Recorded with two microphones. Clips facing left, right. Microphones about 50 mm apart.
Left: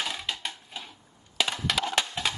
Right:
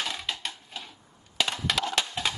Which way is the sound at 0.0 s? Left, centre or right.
Centre.